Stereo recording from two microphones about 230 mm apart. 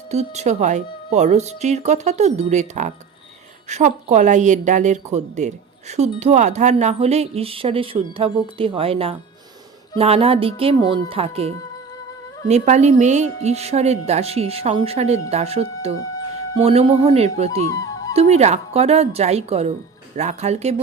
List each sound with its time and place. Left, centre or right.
0.1 s speech: right
17.7 s music: centre
18.1 s speech: right